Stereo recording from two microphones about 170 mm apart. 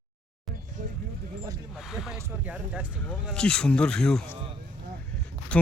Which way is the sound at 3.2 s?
5° left (ahead or behind).